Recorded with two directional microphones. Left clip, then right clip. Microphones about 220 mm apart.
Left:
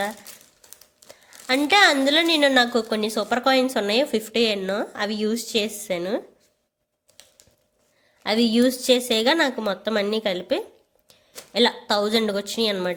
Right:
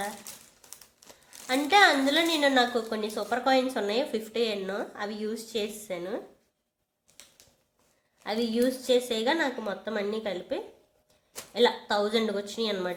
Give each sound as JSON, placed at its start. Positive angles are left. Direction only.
{"t": 1.5, "sound": "a woman's voice", "side_deg": 40}
{"t": 8.2, "sound": "a woman's voice", "side_deg": 40}